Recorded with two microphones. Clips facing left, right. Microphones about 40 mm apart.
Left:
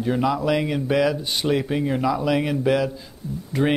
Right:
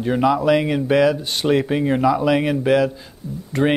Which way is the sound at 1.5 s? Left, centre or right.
Centre.